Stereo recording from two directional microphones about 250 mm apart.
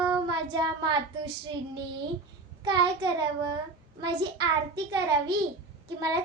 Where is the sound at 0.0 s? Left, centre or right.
Centre.